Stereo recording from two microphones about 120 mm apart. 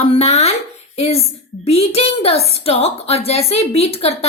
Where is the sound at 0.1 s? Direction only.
60° left (ahead or behind).